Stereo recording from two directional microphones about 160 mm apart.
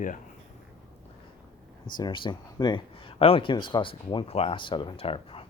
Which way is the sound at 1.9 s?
30° left (ahead or behind).